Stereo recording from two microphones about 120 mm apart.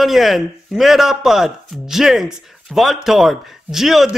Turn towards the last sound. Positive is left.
turn(degrees=0)  # may be behind; listen again after turning